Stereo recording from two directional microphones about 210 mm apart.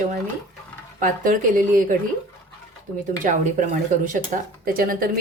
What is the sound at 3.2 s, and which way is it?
A woman's voice, 40° right (ahead or behind).